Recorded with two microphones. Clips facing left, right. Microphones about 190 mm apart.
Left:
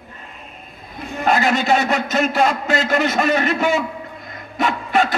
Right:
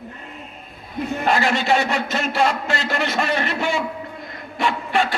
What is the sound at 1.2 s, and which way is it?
A man's voice, 45° left (ahead or behind).